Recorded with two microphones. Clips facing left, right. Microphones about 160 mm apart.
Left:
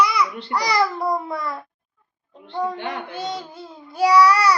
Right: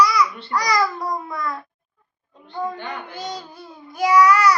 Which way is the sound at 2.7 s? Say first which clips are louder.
Left 3 dB; 70° left (ahead or behind).